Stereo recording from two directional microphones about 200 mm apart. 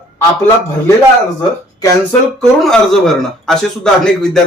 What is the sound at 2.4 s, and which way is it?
A man's voice, centre (ahead or behind).